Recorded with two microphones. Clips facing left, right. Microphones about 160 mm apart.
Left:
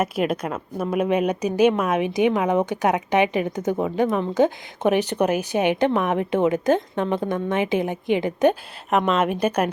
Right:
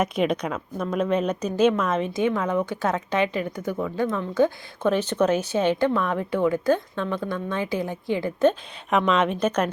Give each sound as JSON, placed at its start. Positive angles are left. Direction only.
{"t": 0.0, "sound": "a woman's voice", "side_deg": 5}
{"t": 9.0, "sound": "a woman's voice", "side_deg": 5}